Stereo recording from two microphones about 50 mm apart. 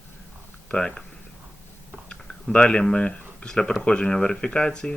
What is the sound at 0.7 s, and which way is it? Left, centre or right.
Speech, centre.